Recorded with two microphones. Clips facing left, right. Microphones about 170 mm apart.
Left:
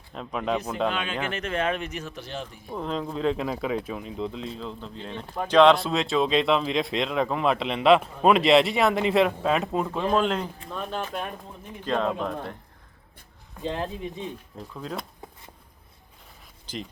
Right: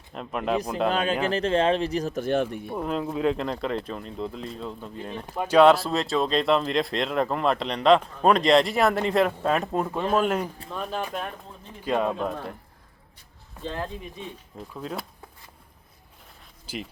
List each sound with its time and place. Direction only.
0.1 s speech: 5° right (ahead or behind)
0.9 s speech: 40° right (ahead or behind); by 2.7 s 65° right (ahead or behind)
2.7 s speech: 5° right (ahead or behind)
13.6 s speech: 20° left (ahead or behind)
14.7 s speech: 5° right (ahead or behind)
16.7 s speech: 10° right (ahead or behind)